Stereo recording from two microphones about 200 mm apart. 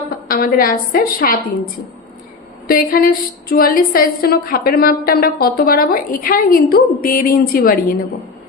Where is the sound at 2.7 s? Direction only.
45° left (ahead or behind).